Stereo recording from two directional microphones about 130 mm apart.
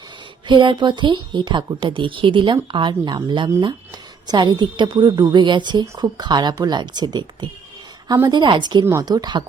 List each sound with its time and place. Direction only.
0.4 s speech: 35° right (ahead or behind)